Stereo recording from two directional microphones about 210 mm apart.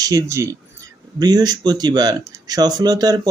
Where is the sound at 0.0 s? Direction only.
15° right (ahead or behind).